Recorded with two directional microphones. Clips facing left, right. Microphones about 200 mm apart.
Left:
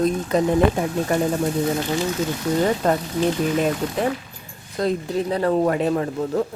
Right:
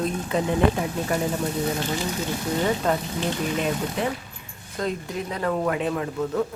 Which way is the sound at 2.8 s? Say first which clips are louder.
Left 3 dB; 40° left (ahead or behind).